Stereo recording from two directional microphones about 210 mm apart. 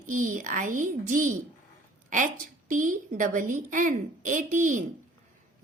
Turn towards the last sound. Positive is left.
turn(degrees=-40)  # may be behind; listen again after turning